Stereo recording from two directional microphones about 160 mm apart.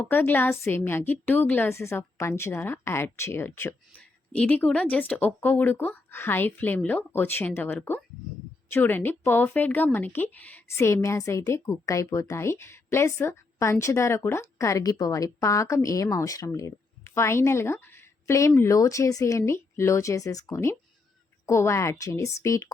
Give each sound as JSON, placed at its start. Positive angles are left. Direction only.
{"t": 0.0, "sound": "a woman's voice", "side_deg": 10}